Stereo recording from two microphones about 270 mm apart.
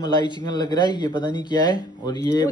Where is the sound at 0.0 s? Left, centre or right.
Centre.